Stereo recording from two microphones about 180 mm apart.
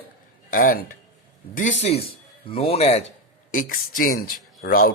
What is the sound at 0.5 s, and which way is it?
Speech, 50° left (ahead or behind).